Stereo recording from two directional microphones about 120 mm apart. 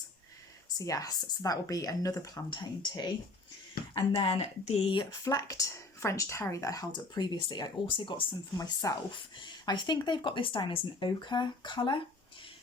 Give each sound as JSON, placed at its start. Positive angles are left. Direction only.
{"t": 0.8, "sound": "speech", "side_deg": 30}
{"t": 4.1, "sound": "speech", "side_deg": 55}
{"t": 4.9, "sound": "speech", "side_deg": 30}
{"t": 8.5, "sound": "speech", "side_deg": 30}
{"t": 9.1, "sound": "speech", "side_deg": 40}